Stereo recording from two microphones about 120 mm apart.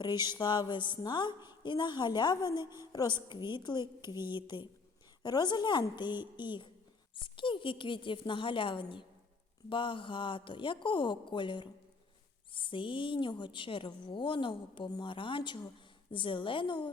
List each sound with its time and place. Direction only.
0.0 s a woman's voice: 35° left (ahead or behind)